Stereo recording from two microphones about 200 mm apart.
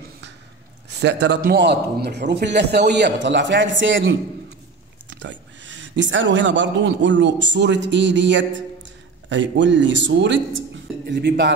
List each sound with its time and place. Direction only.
0.9 s a man's voice: 60° right (ahead or behind)
5.2 s a man's voice: 65° right (ahead or behind)